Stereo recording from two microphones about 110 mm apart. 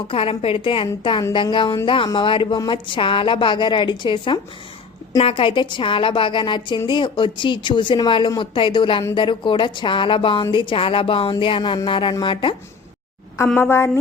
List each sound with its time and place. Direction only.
0.1 s a woman's voice: 60° left (ahead or behind)
13.6 s a woman's voice: 20° left (ahead or behind)